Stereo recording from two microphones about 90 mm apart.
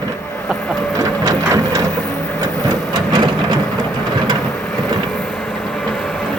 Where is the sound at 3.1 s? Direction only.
55° right (ahead or behind).